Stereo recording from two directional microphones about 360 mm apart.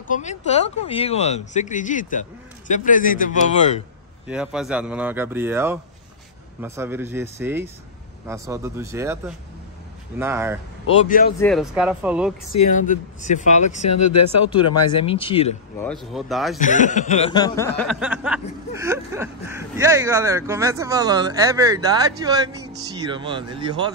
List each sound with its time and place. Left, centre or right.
0.1 s speech: centre
4.3 s speech: centre
11.1 s speech: left
11.3 s speech: centre
12.5 s speech: left
15.9 s speech: centre
16.5 s speech: left
17.7 s speech: centre